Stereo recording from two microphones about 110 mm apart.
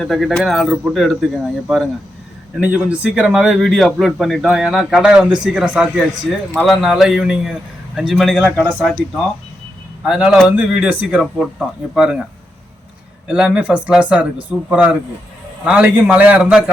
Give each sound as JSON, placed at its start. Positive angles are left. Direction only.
{"t": 0.0, "sound": "speech", "side_deg": 0}
{"t": 2.6, "sound": "speech", "side_deg": -15}